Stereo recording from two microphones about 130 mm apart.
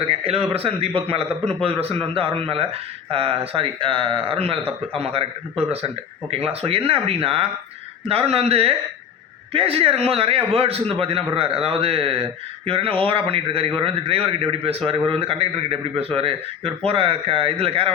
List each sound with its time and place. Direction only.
0.1 s a man's voice: 50° right (ahead or behind)